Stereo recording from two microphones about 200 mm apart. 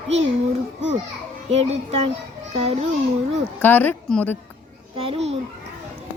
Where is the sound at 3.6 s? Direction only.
10° left (ahead or behind).